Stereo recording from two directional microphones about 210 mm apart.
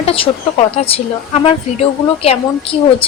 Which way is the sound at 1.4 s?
30° left (ahead or behind).